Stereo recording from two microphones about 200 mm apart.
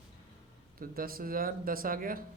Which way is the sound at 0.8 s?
45° right (ahead or behind).